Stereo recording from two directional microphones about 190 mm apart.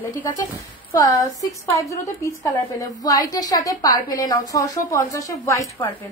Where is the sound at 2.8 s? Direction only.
20° left (ahead or behind).